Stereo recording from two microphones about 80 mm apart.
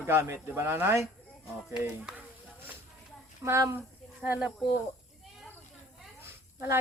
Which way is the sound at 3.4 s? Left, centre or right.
Right.